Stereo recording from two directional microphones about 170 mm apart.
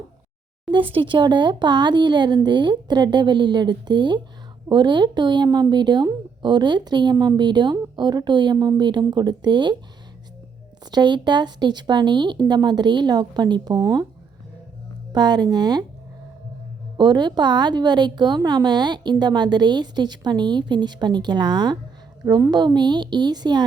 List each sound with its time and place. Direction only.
0.7 s a woman's voice: 30° right (ahead or behind)
10.9 s a woman's voice: 25° right (ahead or behind)
15.1 s a woman's voice: 25° right (ahead or behind)
17.0 s a woman's voice: 25° right (ahead or behind)